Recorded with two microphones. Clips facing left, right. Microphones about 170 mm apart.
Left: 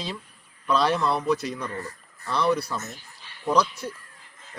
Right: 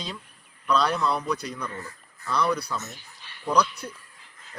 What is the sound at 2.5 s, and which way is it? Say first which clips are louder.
A man's voice: left 3 dB; 5° left (ahead or behind).